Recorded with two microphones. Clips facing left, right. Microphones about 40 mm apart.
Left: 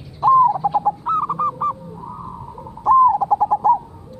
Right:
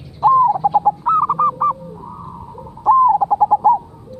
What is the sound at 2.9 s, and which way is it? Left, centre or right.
Bird, centre.